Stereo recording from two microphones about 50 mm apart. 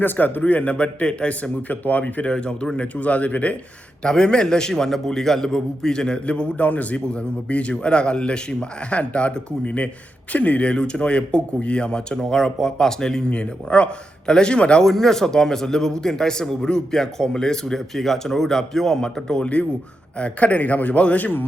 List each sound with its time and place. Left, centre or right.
0.0 s a man's voice: left
2.3 s a man's voice: centre
4.0 s a man's voice: centre
14.8 s a man's voice: centre; by 21.4 s left